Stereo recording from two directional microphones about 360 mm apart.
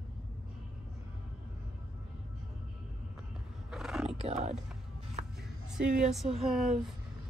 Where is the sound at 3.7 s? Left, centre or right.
Centre.